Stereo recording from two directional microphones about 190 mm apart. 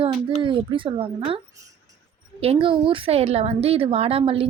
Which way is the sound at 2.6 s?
30° right (ahead or behind).